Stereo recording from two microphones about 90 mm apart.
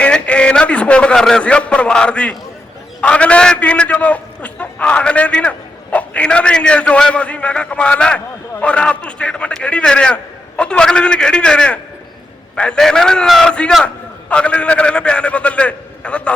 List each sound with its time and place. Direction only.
0.0 s a man's voice: 10° left (ahead or behind)